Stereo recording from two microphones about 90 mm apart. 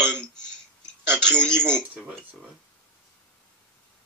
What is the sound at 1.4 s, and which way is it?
Speech, 10° left (ahead or behind).